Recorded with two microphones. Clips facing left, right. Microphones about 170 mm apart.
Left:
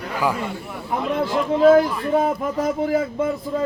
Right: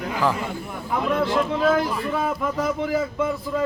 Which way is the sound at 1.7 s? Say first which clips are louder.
Left 6 dB; 40° left (ahead or behind).